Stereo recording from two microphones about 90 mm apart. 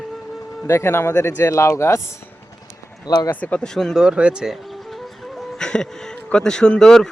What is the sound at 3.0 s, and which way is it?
Speech, 50° left (ahead or behind).